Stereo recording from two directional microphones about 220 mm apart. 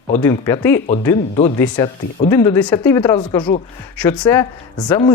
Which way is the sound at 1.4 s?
25° left (ahead or behind).